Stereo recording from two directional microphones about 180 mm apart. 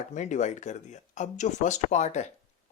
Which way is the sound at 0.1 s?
40° left (ahead or behind).